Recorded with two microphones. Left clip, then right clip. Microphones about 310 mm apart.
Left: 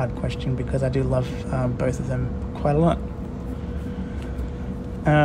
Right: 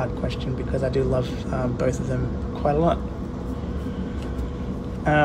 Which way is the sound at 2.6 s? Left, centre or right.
Left.